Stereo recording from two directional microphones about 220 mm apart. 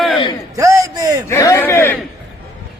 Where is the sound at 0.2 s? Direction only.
20° left (ahead or behind).